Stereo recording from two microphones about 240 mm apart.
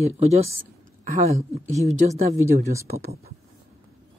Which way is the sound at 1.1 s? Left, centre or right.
Right.